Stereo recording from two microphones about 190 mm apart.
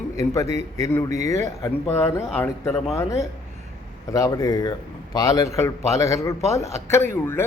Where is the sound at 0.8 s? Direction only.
15° left (ahead or behind).